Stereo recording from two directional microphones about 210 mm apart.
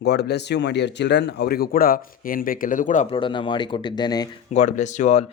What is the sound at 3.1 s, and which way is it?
Speech, 25° left (ahead or behind).